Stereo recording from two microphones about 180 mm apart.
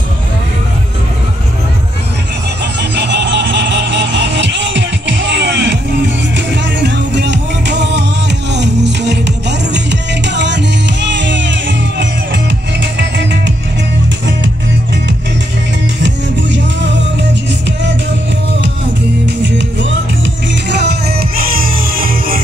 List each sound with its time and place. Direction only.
2.6 s vehicle: 70° right (ahead or behind)
8.5 s music: 70° right (ahead or behind)
16.0 s music: 85° right
19.2 s music: 80° right
20.7 s music: 65° right (ahead or behind)